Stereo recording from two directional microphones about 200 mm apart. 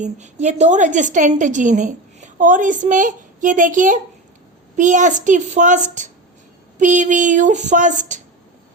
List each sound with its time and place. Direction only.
0.0 s a woman's voice: 35° right (ahead or behind)